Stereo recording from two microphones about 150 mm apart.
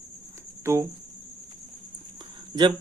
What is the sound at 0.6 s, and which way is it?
Cricket, 15° right (ahead or behind).